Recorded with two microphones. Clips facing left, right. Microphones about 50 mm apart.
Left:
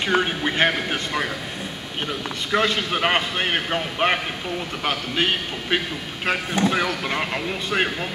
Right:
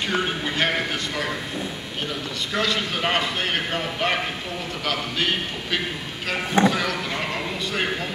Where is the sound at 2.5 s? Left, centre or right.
Left.